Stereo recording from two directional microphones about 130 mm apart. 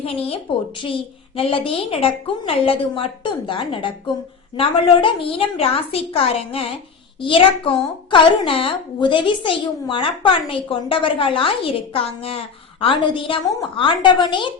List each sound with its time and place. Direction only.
0.0 s a woman's voice: 50° left (ahead or behind)